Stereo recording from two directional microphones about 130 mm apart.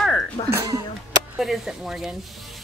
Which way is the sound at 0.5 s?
25° right (ahead or behind).